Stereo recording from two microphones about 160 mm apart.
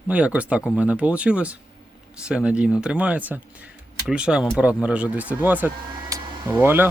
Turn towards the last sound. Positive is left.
turn(degrees=-15)  # may be behind; listen again after turning